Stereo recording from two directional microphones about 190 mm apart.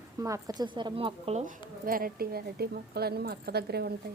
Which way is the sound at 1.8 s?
50° right (ahead or behind).